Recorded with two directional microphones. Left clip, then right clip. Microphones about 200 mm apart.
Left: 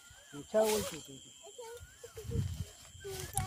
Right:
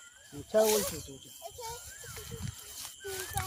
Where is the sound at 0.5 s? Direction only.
45° right (ahead or behind).